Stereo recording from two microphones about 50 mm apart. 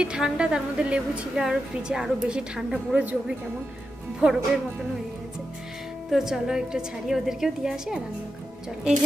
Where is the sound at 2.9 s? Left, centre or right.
Right.